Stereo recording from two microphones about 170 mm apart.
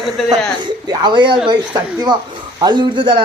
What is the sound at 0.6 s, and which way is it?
Speech, 25° right (ahead or behind).